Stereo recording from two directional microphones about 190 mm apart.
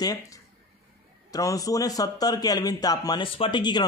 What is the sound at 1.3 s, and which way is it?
Speech, 20° left (ahead or behind).